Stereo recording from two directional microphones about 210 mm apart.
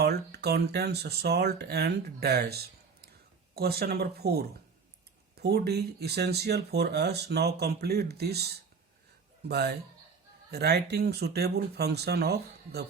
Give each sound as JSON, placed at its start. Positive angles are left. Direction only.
{"t": 0.0, "sound": "speech", "side_deg": -50}
{"t": 3.0, "sound": "a sound", "side_deg": -50}
{"t": 5.3, "sound": "speech", "side_deg": -50}